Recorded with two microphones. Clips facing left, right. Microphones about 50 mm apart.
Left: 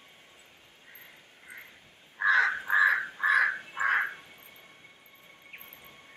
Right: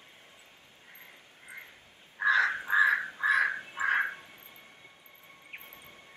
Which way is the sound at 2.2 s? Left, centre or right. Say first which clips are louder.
Left 1 dB; left.